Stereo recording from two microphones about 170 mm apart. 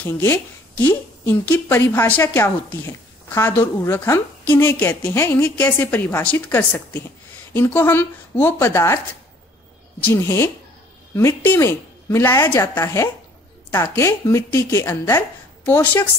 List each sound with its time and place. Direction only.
0.0 s speech: 15° left (ahead or behind)
10.1 s speech: 15° left (ahead or behind)